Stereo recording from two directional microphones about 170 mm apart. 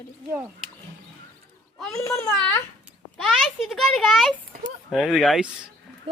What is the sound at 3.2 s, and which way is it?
A child's voice, centre (ahead or behind).